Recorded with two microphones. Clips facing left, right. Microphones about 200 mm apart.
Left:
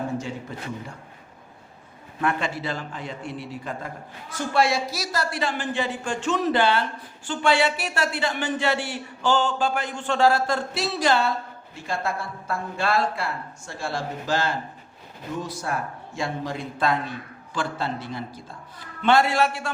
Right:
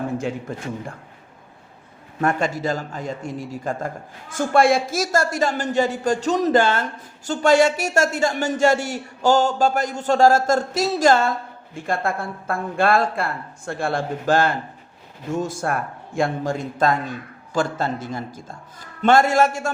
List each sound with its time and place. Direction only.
0.2 s a man's voice: 55° right (ahead or behind)
2.2 s a man's voice: 45° right (ahead or behind)